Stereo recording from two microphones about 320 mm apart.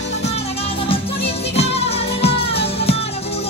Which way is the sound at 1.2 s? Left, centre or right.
Centre.